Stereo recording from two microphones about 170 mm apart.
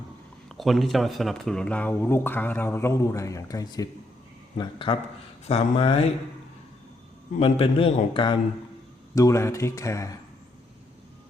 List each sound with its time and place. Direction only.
0.4 s a man's voice: centre (ahead or behind); by 6.1 s 35° left (ahead or behind)
7.3 s a man's voice: 35° left (ahead or behind)
9.1 s speech: 20° left (ahead or behind)